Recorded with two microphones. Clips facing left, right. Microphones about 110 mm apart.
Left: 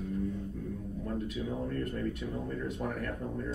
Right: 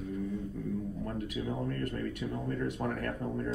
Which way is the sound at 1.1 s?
65° right (ahead or behind).